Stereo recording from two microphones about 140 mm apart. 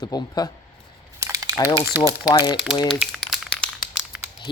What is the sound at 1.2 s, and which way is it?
Crumpling, 25° right (ahead or behind).